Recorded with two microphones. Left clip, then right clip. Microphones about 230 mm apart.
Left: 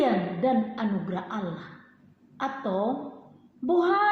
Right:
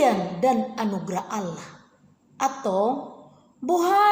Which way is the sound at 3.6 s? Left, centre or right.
Right.